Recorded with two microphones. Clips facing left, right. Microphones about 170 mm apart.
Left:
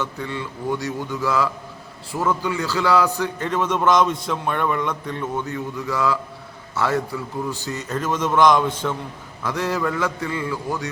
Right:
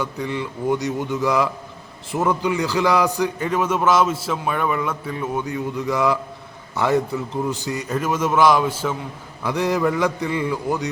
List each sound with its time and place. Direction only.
0.0 s a man's voice: 15° right (ahead or behind)